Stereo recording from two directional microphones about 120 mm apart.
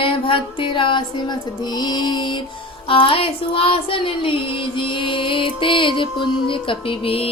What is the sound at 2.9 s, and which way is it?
Music, 50° left (ahead or behind).